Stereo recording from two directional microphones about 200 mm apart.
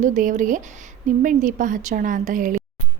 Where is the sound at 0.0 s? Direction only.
40° right (ahead or behind).